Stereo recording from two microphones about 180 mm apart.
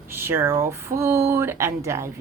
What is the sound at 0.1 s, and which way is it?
Speech, 15° right (ahead or behind).